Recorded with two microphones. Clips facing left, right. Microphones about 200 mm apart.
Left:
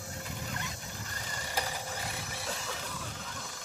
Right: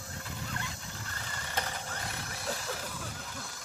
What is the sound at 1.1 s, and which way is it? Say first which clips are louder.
Mechanisms: left 1 dB; 15° left (ahead or behind).